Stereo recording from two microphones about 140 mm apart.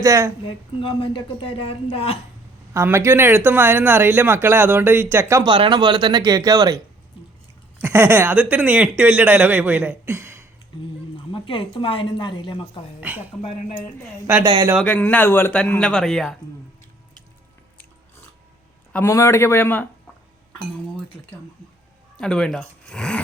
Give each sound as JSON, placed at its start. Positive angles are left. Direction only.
{"t": 0.0, "sound": "a woman's voice", "side_deg": -25}
{"t": 0.4, "sound": "a woman's voice", "side_deg": 35}
{"t": 2.7, "sound": "speech", "side_deg": -20}
{"t": 5.4, "sound": "speech", "side_deg": -35}
{"t": 7.8, "sound": "speech", "side_deg": -15}
{"t": 11.3, "sound": "a woman's voice", "side_deg": 35}
{"t": 13.0, "sound": "speech", "side_deg": -10}
{"t": 14.4, "sound": "speech", "side_deg": -35}
{"t": 14.8, "sound": "speech", "side_deg": 10}
{"t": 18.9, "sound": "speech", "side_deg": 20}
{"t": 22.2, "sound": "speech", "side_deg": 5}